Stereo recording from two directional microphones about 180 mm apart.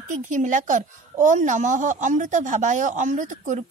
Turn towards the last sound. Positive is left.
turn(degrees=-45)  # may be behind; listen again after turning